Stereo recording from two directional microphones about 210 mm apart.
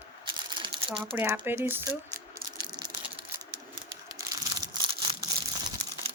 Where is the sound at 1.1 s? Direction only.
10° right (ahead or behind).